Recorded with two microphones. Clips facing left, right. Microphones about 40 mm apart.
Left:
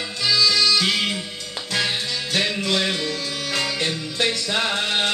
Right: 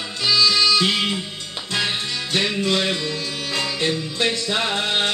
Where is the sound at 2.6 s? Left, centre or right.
Right.